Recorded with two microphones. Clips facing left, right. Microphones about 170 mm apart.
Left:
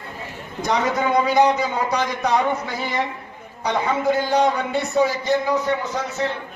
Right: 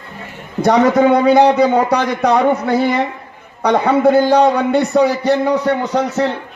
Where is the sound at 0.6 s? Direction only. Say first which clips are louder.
Right 10 dB; 70° right (ahead or behind).